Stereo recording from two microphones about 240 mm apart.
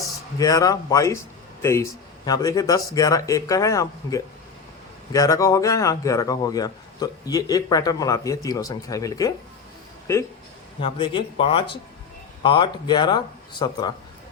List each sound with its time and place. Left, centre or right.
0.3 s speech: centre